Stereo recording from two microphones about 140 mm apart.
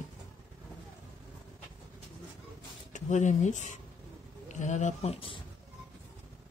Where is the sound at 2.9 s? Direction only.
60° left (ahead or behind); by 5.3 s 45° left (ahead or behind).